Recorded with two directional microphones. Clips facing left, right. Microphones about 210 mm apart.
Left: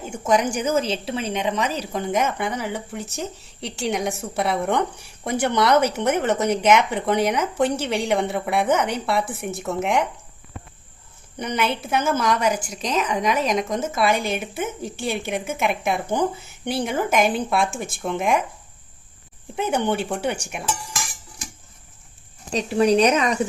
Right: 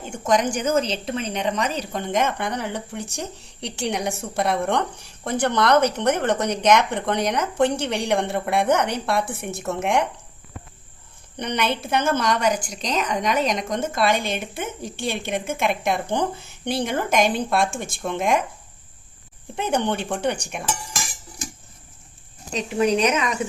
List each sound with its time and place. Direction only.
0.1 s a woman's voice: 10° left (ahead or behind)
11.3 s speech: 5° left (ahead or behind)
19.5 s speech: 5° left (ahead or behind)
22.5 s speech: 35° left (ahead or behind)